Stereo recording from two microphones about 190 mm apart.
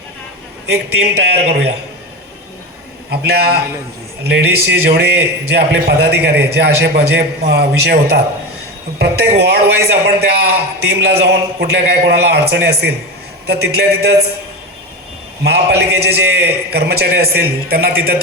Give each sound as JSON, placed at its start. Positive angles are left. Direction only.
{"t": 0.7, "sound": "a man's voice", "side_deg": -60}
{"t": 3.1, "sound": "a man's voice", "side_deg": -55}
{"t": 9.4, "sound": "a man's voice", "side_deg": -60}
{"t": 15.4, "sound": "a man's voice", "side_deg": -60}